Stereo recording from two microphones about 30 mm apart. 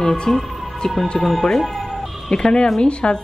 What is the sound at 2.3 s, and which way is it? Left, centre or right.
Speech, left.